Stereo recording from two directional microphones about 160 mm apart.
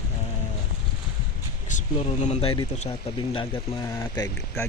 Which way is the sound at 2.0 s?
40° left (ahead or behind).